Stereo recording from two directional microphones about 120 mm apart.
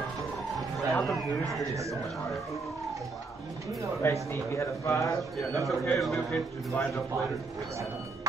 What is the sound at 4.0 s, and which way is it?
Speech, 20° left (ahead or behind).